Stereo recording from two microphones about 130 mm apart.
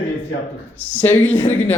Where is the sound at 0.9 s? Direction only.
15° left (ahead or behind).